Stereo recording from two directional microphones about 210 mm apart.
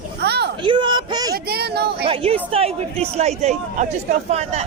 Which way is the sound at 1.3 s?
50° right (ahead or behind).